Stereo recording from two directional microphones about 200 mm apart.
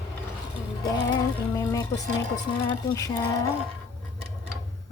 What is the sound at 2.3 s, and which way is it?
Speech, 20° left (ahead or behind).